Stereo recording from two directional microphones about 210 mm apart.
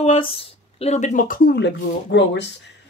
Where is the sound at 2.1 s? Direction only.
55° left (ahead or behind).